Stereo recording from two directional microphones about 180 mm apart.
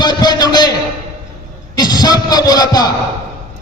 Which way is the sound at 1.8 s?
20° left (ahead or behind).